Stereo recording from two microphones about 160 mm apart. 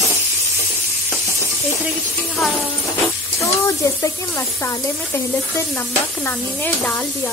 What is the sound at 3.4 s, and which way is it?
Speech, 20° left (ahead or behind).